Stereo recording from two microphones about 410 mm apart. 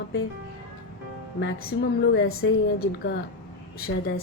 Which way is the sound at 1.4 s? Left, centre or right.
Left.